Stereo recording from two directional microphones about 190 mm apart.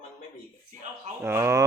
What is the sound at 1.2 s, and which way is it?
Speech, 15° right (ahead or behind).